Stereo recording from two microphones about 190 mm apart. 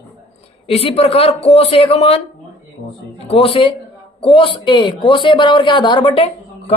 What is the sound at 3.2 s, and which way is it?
Speech, 30° left (ahead or behind).